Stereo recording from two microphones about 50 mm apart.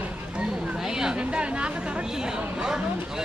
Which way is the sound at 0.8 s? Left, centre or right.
Centre.